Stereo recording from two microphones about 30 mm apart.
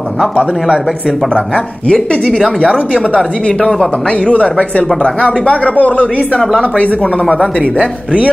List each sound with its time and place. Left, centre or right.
4.3 s speech: left
7.6 s speech: left